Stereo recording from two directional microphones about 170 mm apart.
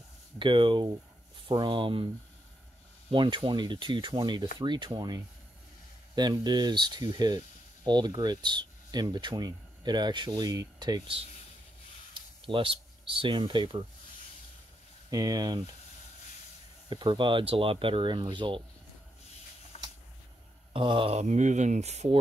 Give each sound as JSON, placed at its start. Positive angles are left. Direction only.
{"t": 0.4, "sound": "speech", "side_deg": -30}
{"t": 3.1, "sound": "speech", "side_deg": -30}
{"t": 12.4, "sound": "speech", "side_deg": -30}
{"t": 15.0, "sound": "speech", "side_deg": -20}
{"t": 16.9, "sound": "speech", "side_deg": -30}
{"t": 19.7, "sound": "a sound", "side_deg": 35}
{"t": 20.7, "sound": "speech", "side_deg": -30}